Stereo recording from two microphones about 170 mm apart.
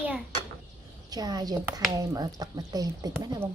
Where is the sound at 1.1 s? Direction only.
25° right (ahead or behind).